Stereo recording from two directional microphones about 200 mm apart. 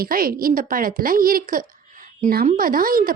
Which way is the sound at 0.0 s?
45° right (ahead or behind).